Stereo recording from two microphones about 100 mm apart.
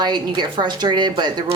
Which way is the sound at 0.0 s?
45° right (ahead or behind).